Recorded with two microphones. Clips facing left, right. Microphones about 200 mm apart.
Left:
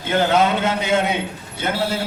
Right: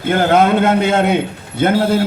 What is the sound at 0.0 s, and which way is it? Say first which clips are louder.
A man's voice: right 5 dB; 55° right (ahead or behind).